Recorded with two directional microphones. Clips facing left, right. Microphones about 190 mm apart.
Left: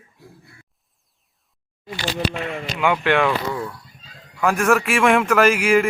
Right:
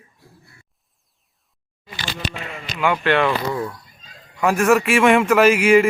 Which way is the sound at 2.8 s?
10° left (ahead or behind).